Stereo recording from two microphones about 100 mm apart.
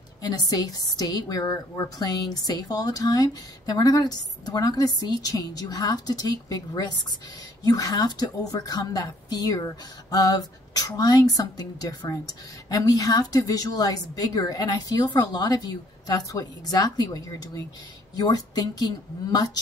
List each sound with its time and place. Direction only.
0.2 s speech: 40° left (ahead or behind)